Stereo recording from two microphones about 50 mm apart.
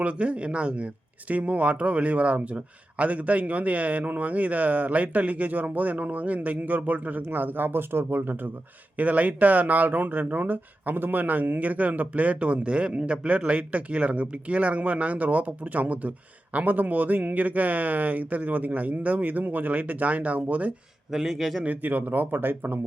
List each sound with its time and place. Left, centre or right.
0.0 s speech: right
7.3 s speech: right
9.0 s speech: right
21.1 s speech: centre
21.6 s speech: right